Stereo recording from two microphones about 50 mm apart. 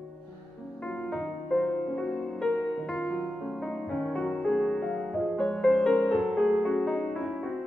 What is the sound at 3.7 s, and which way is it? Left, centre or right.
Music, centre.